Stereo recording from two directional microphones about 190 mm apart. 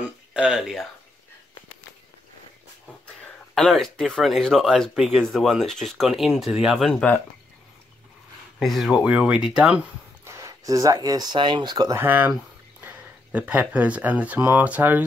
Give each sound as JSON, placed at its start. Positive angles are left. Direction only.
{"t": 0.0, "sound": "speech", "side_deg": -5}
{"t": 3.5, "sound": "speech", "side_deg": 0}
{"t": 8.5, "sound": "speech", "side_deg": 0}
{"t": 10.2, "sound": "speech", "side_deg": -15}